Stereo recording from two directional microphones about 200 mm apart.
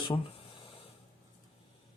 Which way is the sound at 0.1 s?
25° left (ahead or behind).